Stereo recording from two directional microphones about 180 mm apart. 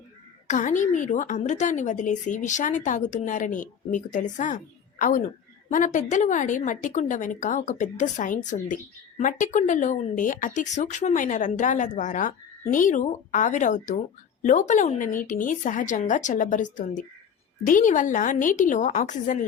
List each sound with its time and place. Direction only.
0.4 s a woman's voice: 45° left (ahead or behind)